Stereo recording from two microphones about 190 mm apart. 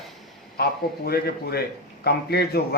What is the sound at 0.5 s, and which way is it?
A man's voice, 55° left (ahead or behind).